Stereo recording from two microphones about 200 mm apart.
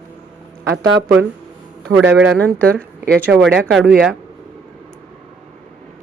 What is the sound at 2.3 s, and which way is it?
Speech, 5° left (ahead or behind).